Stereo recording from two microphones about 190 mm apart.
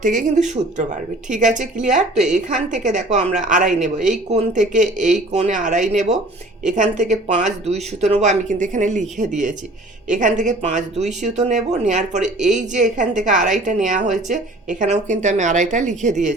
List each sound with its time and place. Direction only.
0.0 s speech: 40° right (ahead or behind)